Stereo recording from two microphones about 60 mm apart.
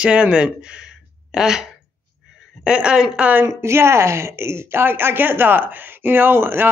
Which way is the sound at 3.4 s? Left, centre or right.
Right.